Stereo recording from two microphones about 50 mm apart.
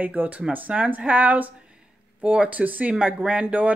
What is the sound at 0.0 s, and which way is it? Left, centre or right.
Speech, right.